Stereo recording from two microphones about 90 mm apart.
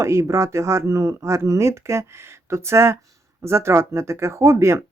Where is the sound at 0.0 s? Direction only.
35° right (ahead or behind).